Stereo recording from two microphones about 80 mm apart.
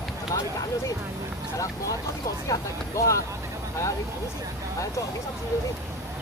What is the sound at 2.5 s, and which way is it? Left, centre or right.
Speech, left.